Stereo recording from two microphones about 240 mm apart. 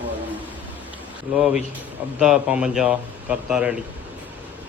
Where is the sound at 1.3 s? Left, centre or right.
Centre.